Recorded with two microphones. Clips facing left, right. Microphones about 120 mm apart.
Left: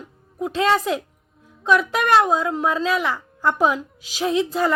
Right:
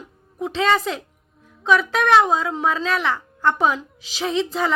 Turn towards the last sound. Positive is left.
turn(degrees=5)  # may be behind; listen again after turning